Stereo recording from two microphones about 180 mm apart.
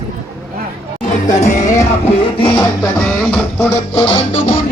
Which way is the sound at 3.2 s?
5° left (ahead or behind).